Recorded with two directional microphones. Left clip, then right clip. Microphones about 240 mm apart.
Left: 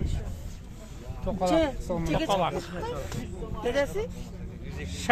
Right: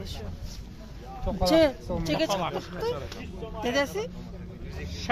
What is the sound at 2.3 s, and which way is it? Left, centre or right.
Speech, left.